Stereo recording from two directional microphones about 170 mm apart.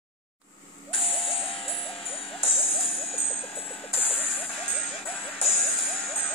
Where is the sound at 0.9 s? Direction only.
30° left (ahead or behind).